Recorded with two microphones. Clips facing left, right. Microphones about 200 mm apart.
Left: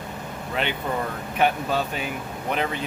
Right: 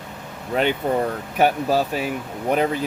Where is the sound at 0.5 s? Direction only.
45° right (ahead or behind).